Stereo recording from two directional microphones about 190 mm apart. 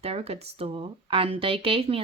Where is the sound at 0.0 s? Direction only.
30° right (ahead or behind).